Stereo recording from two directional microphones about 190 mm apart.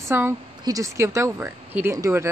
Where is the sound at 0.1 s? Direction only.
15° right (ahead or behind).